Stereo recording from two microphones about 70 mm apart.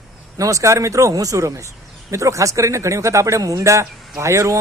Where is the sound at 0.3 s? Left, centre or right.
Right.